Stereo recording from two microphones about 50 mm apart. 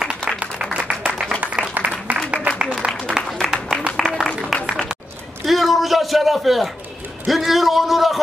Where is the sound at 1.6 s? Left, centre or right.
Right.